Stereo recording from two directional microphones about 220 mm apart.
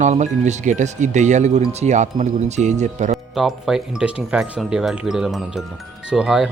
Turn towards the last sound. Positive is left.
turn(degrees=-5)  # may be behind; listen again after turning